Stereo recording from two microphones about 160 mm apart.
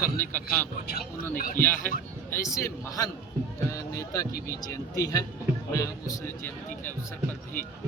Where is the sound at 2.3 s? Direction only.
20° left (ahead or behind).